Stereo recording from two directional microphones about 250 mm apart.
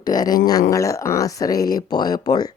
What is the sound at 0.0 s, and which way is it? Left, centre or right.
Speech, centre.